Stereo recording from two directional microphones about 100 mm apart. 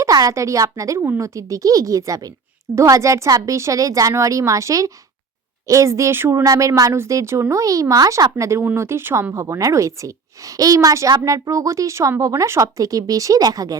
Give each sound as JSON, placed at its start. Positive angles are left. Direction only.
{"t": 0.0, "sound": "speech", "side_deg": -35}
{"t": 6.4, "sound": "speech", "side_deg": -35}